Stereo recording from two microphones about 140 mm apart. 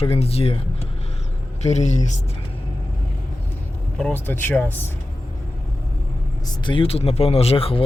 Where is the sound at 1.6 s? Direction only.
55° left (ahead or behind).